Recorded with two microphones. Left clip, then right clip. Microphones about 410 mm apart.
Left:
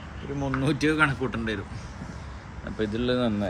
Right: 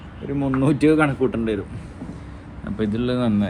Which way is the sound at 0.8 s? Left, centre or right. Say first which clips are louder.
Right 5 dB; centre.